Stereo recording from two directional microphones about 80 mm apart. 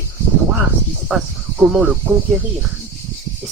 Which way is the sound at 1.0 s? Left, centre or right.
Centre.